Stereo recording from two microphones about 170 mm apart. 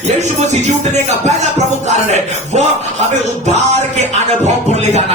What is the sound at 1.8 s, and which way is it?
Speech, 40° right (ahead or behind).